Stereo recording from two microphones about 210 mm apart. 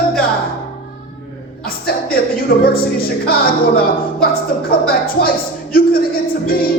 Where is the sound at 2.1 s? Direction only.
45° left (ahead or behind).